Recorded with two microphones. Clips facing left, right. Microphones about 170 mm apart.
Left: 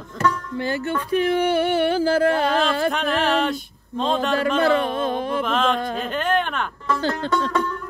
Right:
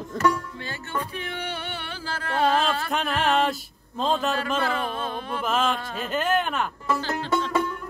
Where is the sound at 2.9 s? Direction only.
Centre (ahead or behind).